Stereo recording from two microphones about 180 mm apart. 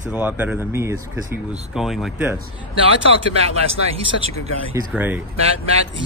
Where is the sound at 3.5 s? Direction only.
35° right (ahead or behind).